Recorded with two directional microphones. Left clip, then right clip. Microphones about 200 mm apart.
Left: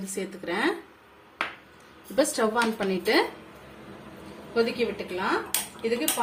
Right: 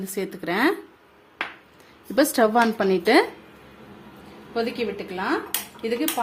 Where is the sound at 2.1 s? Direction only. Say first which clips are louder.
Right 5 dB; 50° right (ahead or behind).